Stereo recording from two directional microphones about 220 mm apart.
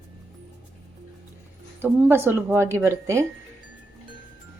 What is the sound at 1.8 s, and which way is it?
Speech, 10° right (ahead or behind).